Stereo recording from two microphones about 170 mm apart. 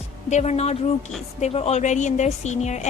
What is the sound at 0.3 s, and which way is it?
A woman's voice, 40° left (ahead or behind).